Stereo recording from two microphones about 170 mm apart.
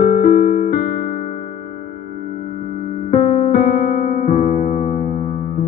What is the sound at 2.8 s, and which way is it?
Music, 50° left (ahead or behind).